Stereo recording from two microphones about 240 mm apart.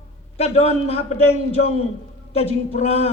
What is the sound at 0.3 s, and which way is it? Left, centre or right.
A man's voice, left.